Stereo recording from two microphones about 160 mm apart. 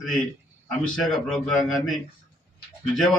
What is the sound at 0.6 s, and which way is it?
A man's voice, 5° left (ahead or behind).